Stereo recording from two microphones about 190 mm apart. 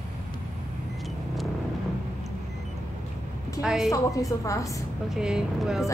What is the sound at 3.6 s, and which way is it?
Speech, centre (ahead or behind).